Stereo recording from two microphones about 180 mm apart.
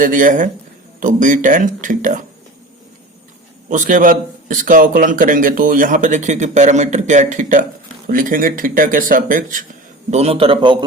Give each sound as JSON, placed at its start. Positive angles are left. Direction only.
{"t": 0.0, "sound": "a man's voice", "side_deg": -45}
{"t": 3.7, "sound": "a man's voice", "side_deg": -45}
{"t": 10.1, "sound": "a man's voice", "side_deg": -35}